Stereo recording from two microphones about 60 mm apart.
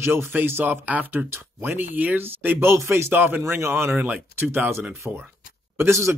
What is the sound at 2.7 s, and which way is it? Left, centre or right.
Speech, right.